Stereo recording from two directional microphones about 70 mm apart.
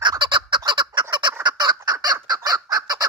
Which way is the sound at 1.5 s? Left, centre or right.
Right.